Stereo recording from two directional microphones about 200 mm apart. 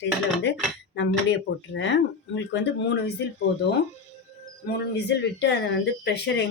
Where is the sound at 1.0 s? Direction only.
65° left (ahead or behind).